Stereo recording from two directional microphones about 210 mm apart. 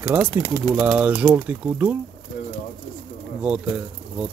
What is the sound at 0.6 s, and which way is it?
Speech, 5° right (ahead or behind).